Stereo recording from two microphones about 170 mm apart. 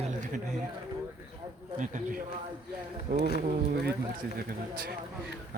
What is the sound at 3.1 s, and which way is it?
Speech, 70° right (ahead or behind).